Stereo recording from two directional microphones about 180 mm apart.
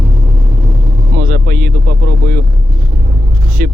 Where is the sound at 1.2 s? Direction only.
55° right (ahead or behind).